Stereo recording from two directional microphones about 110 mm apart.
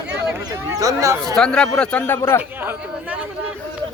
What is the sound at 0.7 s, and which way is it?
Speech, 30° right (ahead or behind).